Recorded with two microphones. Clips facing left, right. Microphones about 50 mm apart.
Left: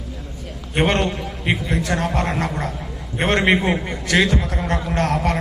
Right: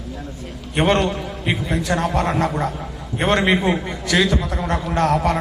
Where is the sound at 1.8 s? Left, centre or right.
Left.